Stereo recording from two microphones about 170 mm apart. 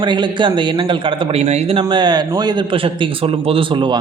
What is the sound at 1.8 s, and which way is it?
A man's voice, 25° right (ahead or behind).